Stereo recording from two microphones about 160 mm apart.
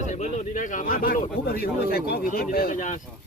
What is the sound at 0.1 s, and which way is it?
Speech, 50° left (ahead or behind).